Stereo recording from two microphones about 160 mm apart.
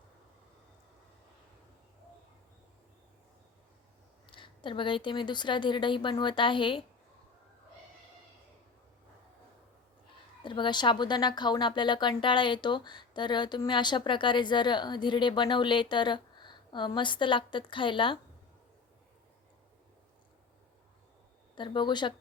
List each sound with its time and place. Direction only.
4.3 s a woman's voice: 30° left (ahead or behind)
10.4 s speech: 30° left (ahead or behind)
21.5 s speech: 30° left (ahead or behind)